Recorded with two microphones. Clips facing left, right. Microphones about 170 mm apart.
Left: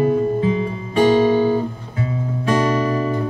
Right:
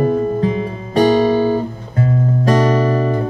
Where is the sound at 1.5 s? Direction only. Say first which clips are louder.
Right 1 dB; 45° right (ahead or behind).